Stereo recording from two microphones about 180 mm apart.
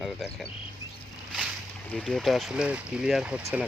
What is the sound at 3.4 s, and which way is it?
Speech, 15° right (ahead or behind).